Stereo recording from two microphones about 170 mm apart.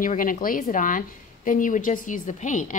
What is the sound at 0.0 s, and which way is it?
A woman's voice, 55° left (ahead or behind).